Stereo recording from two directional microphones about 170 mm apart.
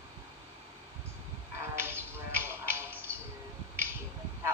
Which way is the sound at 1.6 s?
15° right (ahead or behind).